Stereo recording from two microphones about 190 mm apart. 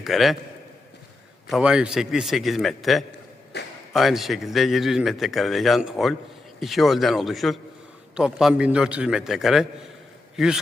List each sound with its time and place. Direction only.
0.0 s a man's voice: centre (ahead or behind)
1.5 s a man's voice: centre (ahead or behind)
3.5 s a sound: 60° left (ahead or behind)
3.9 s a man's voice: centre (ahead or behind)